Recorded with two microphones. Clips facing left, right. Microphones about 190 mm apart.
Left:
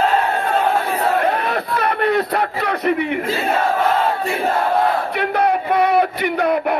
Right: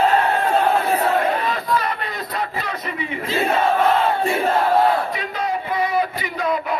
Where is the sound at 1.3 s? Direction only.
65° left (ahead or behind).